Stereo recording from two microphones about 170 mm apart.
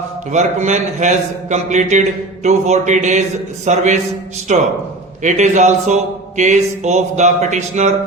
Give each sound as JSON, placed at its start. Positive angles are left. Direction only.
{"t": 0.3, "sound": "a man's voice", "side_deg": -45}